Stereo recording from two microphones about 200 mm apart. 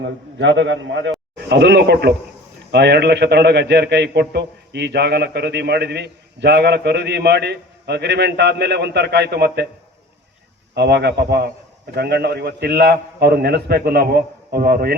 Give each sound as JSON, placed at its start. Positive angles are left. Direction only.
{"t": 0.3, "sound": "a man's voice", "side_deg": -65}
{"t": 10.8, "sound": "a man's voice", "side_deg": -55}